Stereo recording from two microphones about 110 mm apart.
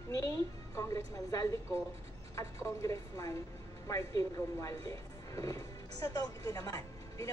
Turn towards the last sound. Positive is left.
turn(degrees=30)  # may be behind; listen again after turning